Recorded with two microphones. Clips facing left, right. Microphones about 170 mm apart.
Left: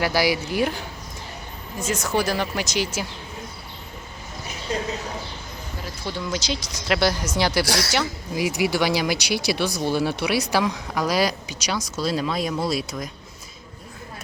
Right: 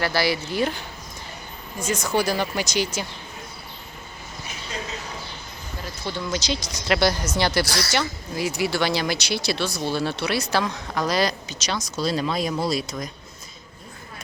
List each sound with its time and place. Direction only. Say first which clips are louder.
0.0 s speech: left 2 dB; 15° left (ahead or behind)
1.8 s speech: even; centre (ahead or behind)
6.1 s speech: right 1 dB; 5° left (ahead or behind)